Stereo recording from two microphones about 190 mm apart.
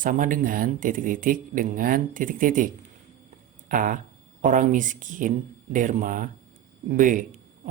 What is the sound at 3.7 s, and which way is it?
Speech, 45° right (ahead or behind).